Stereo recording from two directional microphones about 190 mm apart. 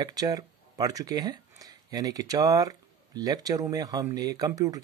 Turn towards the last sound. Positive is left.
turn(degrees=-20)  # may be behind; listen again after turning